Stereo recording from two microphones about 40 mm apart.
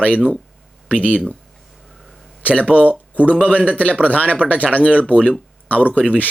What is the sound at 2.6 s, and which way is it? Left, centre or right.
Speech, right.